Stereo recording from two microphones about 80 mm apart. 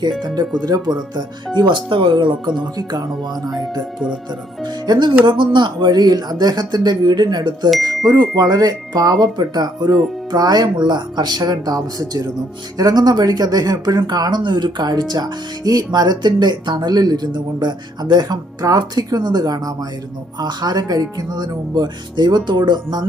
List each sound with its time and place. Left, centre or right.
0.7 s speech: right
1.5 s speech: right
3.6 s speech: centre
4.6 s speech: right
5.2 s speech: right